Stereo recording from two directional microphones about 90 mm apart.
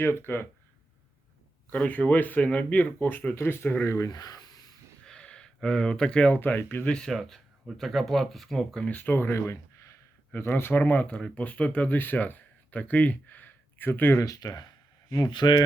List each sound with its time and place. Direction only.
0.0 s speech: 25° left (ahead or behind)
1.7 s speech: 15° left (ahead or behind)
3.9 s speech: 40° left (ahead or behind)
5.0 s a sound: 10° left (ahead or behind)
6.3 s speech: 20° left (ahead or behind)
6.9 s speech: 5° left (ahead or behind); by 14.2 s 20° left (ahead or behind)
14.2 s speech: 40° left (ahead or behind)